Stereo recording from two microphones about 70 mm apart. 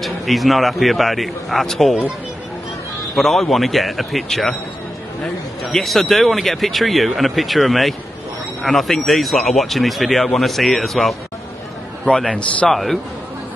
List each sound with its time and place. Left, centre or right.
0.0 s speech: centre
3.2 s a man's voice: centre
12.3 s a man's voice: centre
12.6 s speech: centre